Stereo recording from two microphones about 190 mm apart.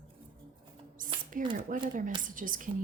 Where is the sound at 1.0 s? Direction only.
45° right (ahead or behind).